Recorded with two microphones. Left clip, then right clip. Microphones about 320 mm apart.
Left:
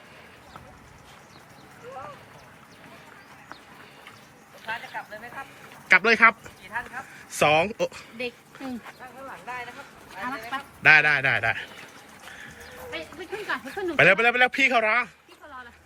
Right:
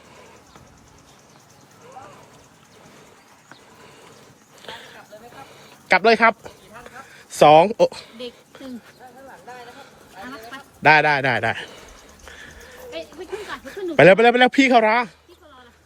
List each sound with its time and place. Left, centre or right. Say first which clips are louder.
5.9 s a man's voice: right 2 dB; centre
7.1 s a sound: right 9 dB; centre
7.8 s a man's voice: right 9 dB; centre
10.8 s a man's voice: right 3 dB; centre
13.9 s a man's voice: right 7 dB; centre